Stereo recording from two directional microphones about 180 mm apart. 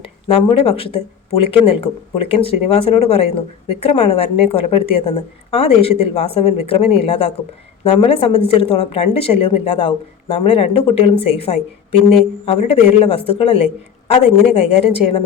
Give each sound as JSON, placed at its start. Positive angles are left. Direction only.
{"t": 0.0, "sound": "speech", "side_deg": 30}